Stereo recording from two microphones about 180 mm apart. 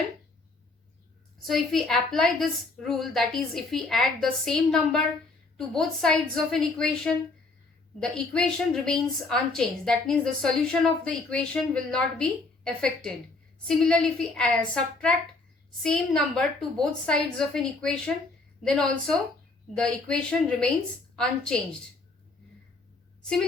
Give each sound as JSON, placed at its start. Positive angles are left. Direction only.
{"t": 1.5, "sound": "a woman's voice", "side_deg": 0}